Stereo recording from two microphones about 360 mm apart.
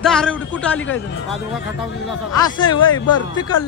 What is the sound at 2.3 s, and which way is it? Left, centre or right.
Speech, centre.